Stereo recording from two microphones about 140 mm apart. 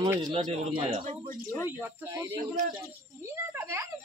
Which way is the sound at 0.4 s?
55° right (ahead or behind).